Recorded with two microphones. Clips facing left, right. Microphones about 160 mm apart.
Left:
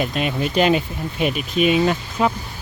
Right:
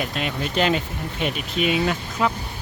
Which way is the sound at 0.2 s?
15° left (ahead or behind).